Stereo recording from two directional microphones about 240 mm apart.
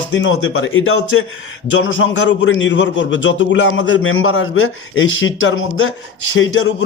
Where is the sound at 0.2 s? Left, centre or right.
Left.